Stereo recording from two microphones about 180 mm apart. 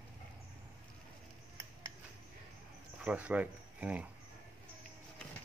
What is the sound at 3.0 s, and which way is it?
Speech, 5° right (ahead or behind).